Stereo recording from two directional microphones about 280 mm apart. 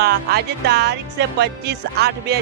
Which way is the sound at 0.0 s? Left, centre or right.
Right.